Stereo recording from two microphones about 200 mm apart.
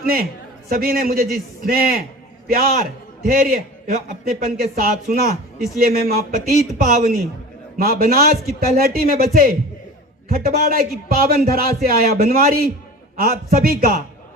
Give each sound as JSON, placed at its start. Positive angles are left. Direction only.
{"t": 0.0, "sound": "a man's voice", "side_deg": -50}